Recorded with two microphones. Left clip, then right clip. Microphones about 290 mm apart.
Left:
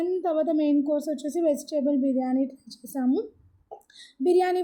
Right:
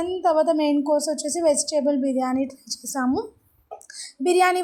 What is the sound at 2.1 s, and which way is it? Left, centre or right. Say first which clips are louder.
Speech: right 3 dB; right.